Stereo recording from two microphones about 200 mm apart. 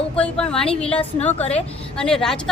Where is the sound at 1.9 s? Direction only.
5° left (ahead or behind).